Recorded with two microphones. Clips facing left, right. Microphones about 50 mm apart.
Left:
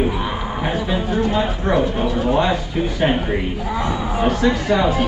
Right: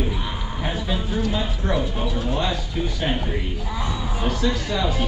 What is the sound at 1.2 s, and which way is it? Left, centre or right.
Speech, left.